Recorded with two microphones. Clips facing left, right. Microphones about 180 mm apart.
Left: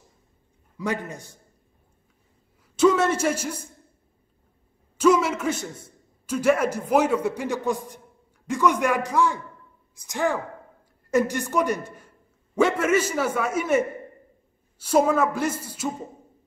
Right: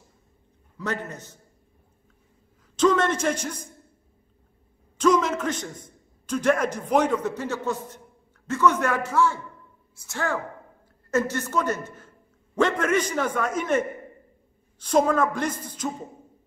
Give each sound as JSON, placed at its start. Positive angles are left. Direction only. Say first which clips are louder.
{"t": 0.7, "sound": "a man's voice", "louder": "left 2 dB", "side_deg": 10}
{"t": 2.7, "sound": "a man's voice", "louder": "left 2 dB", "side_deg": 10}
{"t": 4.9, "sound": "a man's voice", "louder": "left 1 dB", "side_deg": 10}